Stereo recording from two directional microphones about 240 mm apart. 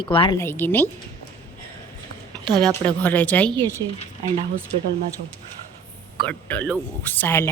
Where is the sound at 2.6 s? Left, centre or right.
Centre.